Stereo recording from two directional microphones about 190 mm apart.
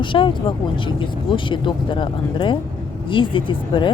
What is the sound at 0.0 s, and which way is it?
Speech, 25° left (ahead or behind).